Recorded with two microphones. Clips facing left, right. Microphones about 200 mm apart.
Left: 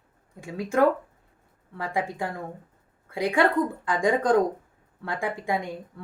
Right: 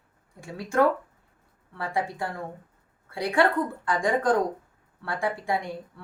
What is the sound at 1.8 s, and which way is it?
A woman's voice, 20° left (ahead or behind).